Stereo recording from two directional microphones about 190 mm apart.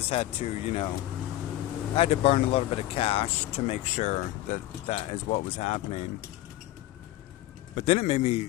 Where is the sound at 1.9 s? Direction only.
30° left (ahead or behind).